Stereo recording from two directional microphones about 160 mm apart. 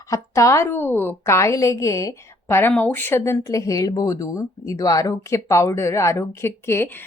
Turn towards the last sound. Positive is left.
turn(degrees=15)  # may be behind; listen again after turning